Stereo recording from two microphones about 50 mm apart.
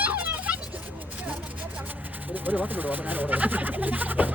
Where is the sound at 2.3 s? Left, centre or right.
Right.